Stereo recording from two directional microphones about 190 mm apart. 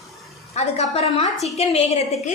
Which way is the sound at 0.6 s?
35° left (ahead or behind).